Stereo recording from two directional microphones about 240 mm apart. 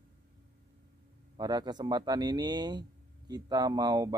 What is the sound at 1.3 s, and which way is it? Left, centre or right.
Speech, centre.